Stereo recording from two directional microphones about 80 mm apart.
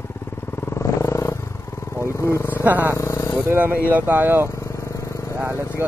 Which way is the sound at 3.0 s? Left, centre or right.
Left.